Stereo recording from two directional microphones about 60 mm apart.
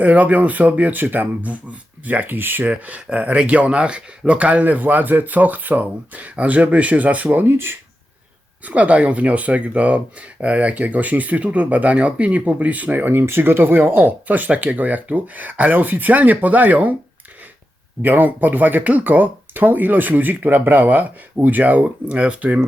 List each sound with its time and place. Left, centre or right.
0.0 s speech: right
7.4 s speech: right
8.6 s speech: right
18.0 s speech: right